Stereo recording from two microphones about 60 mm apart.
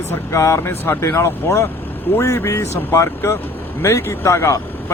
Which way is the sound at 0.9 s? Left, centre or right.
Left.